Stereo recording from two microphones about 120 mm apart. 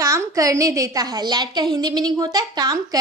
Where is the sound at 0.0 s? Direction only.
25° right (ahead or behind).